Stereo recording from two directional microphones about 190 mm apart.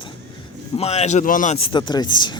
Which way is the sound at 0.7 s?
35° left (ahead or behind).